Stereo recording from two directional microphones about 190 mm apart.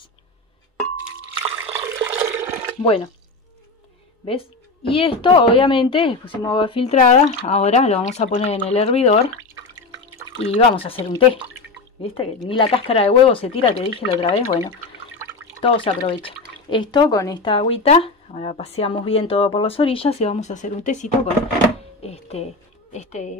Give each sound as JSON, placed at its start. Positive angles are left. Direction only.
{"t": 1.4, "sound": "toilet flush", "side_deg": -10}
{"t": 4.3, "sound": "speech", "side_deg": 30}
{"t": 10.4, "sound": "speech", "side_deg": 30}
{"t": 15.6, "sound": "speech", "side_deg": 30}